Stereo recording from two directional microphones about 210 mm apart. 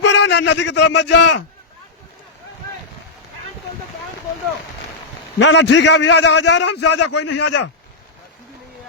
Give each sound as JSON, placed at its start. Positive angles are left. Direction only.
{"t": 0.0, "sound": "a man's voice", "side_deg": 55}
{"t": 5.4, "sound": "a man's voice", "side_deg": 55}